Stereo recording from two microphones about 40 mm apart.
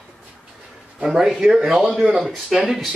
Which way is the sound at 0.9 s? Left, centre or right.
Centre.